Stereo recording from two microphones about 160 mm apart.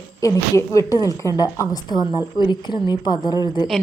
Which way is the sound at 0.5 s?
20° left (ahead or behind).